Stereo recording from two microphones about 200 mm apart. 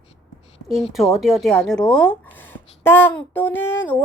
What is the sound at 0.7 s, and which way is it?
Speech, centre (ahead or behind).